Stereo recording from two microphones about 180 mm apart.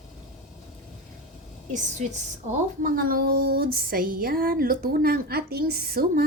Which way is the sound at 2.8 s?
50° right (ahead or behind).